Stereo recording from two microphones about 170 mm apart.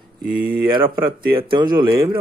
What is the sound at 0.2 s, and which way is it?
Speech, 60° right (ahead or behind).